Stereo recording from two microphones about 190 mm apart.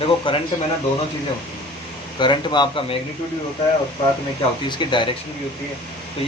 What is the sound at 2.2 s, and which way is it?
Speech, 25° left (ahead or behind).